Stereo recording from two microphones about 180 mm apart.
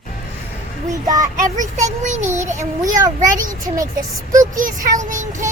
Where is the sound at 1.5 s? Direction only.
40° right (ahead or behind).